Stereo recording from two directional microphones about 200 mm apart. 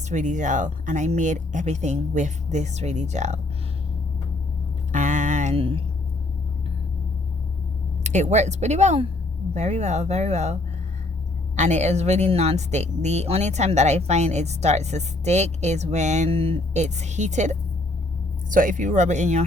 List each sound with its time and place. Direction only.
0.1 s speech: 40° right (ahead or behind)
4.9 s a sound: 40° right (ahead or behind)
8.0 s speech: 35° right (ahead or behind)